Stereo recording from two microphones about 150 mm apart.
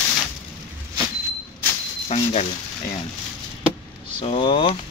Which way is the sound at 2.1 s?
40° left (ahead or behind).